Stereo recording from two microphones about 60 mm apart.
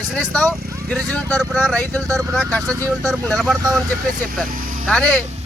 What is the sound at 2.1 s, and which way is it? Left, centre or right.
Speech, centre.